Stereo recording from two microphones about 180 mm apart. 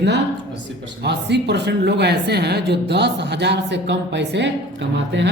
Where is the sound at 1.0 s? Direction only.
70° right (ahead or behind).